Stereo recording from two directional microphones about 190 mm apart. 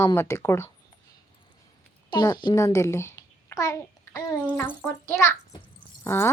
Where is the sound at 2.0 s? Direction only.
25° left (ahead or behind).